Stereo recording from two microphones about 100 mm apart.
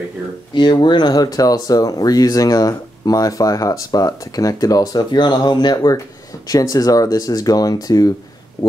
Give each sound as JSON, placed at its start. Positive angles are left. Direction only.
{"t": 0.6, "sound": "speech", "side_deg": 50}